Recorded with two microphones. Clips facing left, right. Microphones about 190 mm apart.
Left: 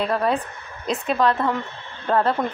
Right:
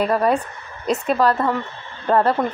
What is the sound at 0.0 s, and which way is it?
Speech, 10° right (ahead or behind).